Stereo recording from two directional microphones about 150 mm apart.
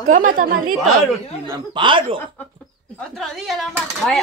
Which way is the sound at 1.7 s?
35° right (ahead or behind).